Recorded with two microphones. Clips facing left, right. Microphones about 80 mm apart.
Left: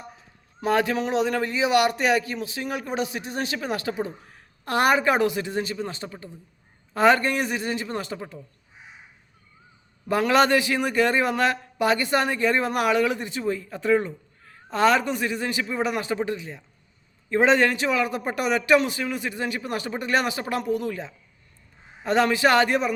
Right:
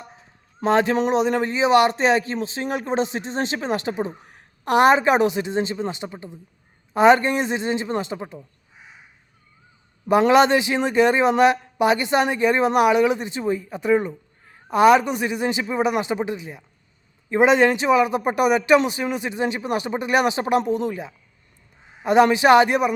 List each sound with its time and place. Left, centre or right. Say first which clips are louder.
0.6 s a man's voice: right 4 dB; right
10.1 s a man's voice: right 4 dB; right